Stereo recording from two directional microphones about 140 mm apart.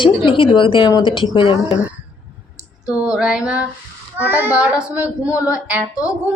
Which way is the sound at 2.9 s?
5° right (ahead or behind).